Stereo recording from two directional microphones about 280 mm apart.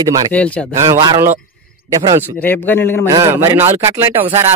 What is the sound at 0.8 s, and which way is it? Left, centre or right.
Speech, centre.